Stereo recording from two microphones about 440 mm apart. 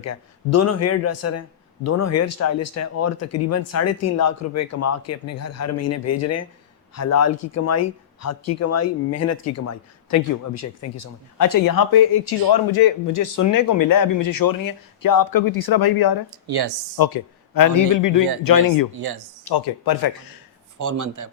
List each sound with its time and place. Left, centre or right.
0.0 s a man's voice: left
16.5 s speech: right
17.0 s speech: left
18.9 s speech: right
19.5 s speech: left
20.7 s a man's voice: right